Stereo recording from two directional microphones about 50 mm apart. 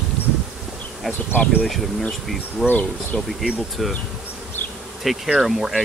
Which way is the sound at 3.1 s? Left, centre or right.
Left.